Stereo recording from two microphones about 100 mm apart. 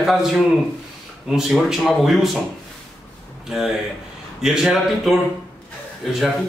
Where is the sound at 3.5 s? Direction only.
5° right (ahead or behind).